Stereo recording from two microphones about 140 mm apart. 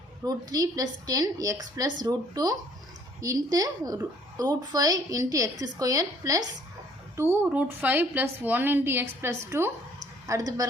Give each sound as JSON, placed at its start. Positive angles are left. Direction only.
{"t": 0.3, "sound": "a woman's voice", "side_deg": -25}